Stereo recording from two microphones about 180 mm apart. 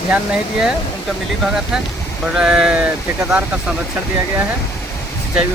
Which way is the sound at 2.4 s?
5° right (ahead or behind).